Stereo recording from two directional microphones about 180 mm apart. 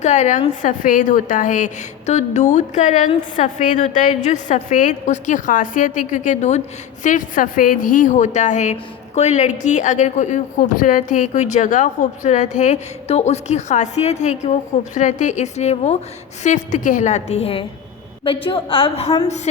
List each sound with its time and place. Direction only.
0.0 s a woman's voice: 40° left (ahead or behind)